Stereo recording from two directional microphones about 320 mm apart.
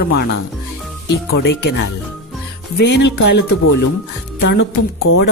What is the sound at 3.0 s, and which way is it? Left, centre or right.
Speech, left.